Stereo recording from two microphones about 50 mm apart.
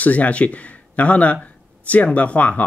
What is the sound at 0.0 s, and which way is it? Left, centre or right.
Speech, left.